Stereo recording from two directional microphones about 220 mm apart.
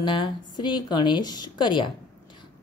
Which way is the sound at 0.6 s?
20° left (ahead or behind).